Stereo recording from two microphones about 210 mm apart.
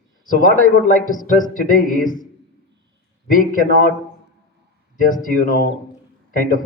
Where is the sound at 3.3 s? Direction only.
40° left (ahead or behind).